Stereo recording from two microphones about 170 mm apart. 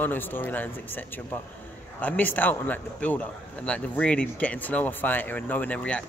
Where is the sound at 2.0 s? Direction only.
10° left (ahead or behind).